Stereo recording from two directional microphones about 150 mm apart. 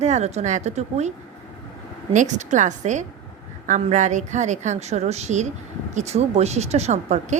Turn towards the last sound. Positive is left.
turn(degrees=-50)  # may be behind; listen again after turning